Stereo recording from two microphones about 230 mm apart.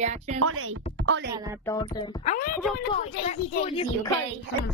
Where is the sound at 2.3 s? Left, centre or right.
Left.